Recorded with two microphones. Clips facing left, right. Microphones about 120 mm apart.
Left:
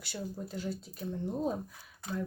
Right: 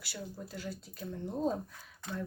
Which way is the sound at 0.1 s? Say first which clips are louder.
Left 4 dB; 20° left (ahead or behind).